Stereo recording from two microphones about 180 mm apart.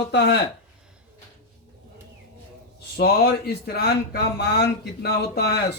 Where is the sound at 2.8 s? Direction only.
60° left (ahead or behind).